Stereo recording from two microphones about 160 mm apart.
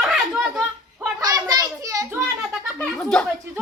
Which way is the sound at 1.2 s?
25° right (ahead or behind).